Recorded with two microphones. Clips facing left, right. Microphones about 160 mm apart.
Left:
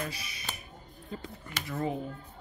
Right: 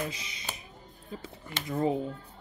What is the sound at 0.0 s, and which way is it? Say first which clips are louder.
Speech: right 2 dB; 20° right (ahead or behind).